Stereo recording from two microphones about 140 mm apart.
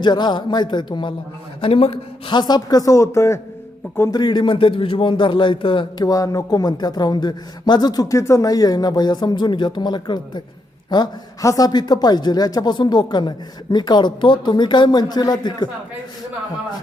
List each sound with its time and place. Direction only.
0.0 s a man's voice: 30° left (ahead or behind)
1.6 s a woman's voice: 45° left (ahead or behind); by 3.4 s 20° left (ahead or behind)
4.1 s a man's voice: 30° left (ahead or behind)